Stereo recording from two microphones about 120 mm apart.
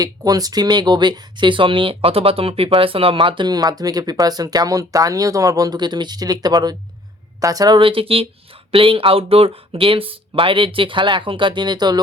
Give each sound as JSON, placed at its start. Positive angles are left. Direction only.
{"t": 0.0, "sound": "speech", "side_deg": -30}
{"t": 7.8, "sound": "speech", "side_deg": -50}